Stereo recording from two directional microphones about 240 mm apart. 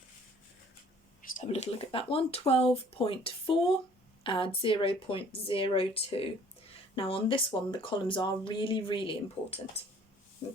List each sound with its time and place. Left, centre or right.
1.3 s speech: left